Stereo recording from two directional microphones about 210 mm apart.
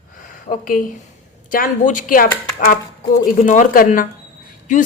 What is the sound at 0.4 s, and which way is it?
Speech, 40° left (ahead or behind).